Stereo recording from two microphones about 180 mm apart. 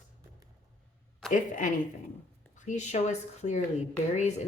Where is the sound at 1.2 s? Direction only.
Centre (ahead or behind).